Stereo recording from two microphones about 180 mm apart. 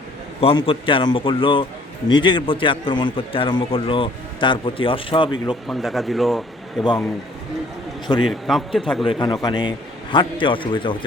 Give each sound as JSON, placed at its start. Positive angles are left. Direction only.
{"t": 0.4, "sound": "a man's voice", "side_deg": 30}
{"t": 5.6, "sound": "a man's voice", "side_deg": 0}
{"t": 8.2, "sound": "a man's voice", "side_deg": 0}
{"t": 9.0, "sound": "a man's voice", "side_deg": 25}